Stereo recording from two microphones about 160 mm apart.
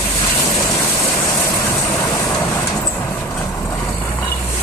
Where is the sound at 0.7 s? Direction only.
20° left (ahead or behind).